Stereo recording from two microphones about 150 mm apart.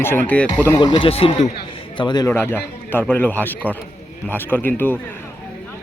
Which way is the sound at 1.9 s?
30° left (ahead or behind).